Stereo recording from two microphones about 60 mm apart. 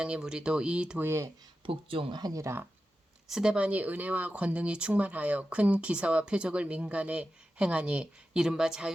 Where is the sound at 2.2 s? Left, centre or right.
Right.